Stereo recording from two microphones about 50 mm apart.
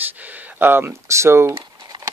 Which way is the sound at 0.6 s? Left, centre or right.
Right.